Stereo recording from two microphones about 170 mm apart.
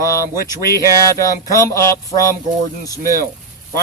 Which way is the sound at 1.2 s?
20° left (ahead or behind).